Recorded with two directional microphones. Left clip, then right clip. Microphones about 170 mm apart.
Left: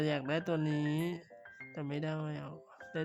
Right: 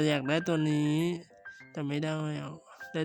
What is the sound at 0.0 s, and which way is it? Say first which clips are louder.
Speech: right 6 dB; 25° right (ahead or behind).